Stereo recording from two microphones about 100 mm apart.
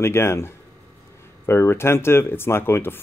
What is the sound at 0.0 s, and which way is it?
Speech, 25° left (ahead or behind).